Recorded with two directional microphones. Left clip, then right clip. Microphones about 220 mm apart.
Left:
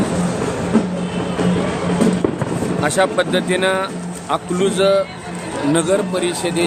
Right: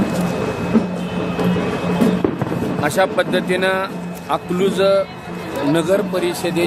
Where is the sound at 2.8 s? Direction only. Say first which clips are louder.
Even; 5° right (ahead or behind).